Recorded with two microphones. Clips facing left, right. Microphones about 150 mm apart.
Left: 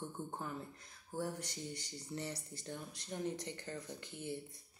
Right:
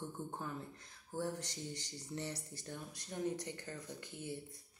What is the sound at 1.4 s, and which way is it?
Speech, 20° right (ahead or behind).